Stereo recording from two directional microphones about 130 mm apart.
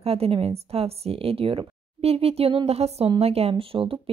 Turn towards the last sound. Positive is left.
turn(degrees=-45)  # may be behind; listen again after turning